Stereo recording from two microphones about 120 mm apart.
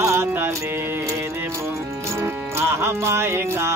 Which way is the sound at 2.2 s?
20° right (ahead or behind).